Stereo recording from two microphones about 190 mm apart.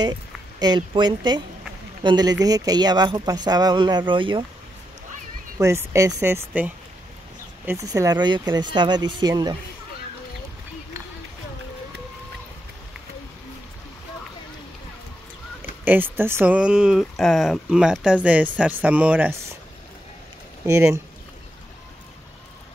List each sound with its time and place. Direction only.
0.6 s speech: 20° right (ahead or behind)
5.6 s speech: 15° right (ahead or behind)
15.8 s speech: 10° right (ahead or behind)
20.6 s speech: 15° right (ahead or behind)